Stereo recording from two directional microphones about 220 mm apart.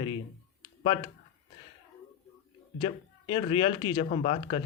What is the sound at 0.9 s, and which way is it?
Speech, 20° left (ahead or behind).